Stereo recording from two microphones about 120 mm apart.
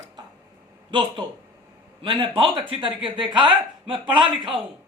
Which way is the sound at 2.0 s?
45° right (ahead or behind).